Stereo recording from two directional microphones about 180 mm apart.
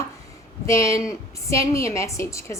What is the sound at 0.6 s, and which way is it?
A woman's voice, 15° left (ahead or behind).